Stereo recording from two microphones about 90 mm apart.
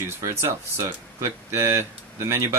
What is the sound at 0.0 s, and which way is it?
Speech, 30° right (ahead or behind).